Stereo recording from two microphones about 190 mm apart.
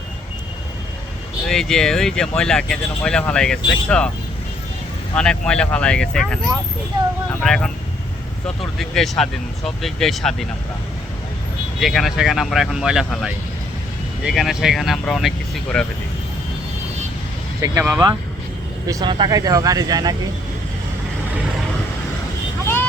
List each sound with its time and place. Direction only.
1.5 s speech: 5° left (ahead or behind)
5.1 s speech: 5° left (ahead or behind)
7.4 s speech: centre (ahead or behind)
11.8 s speech: centre (ahead or behind)
17.6 s speech: 10° right (ahead or behind)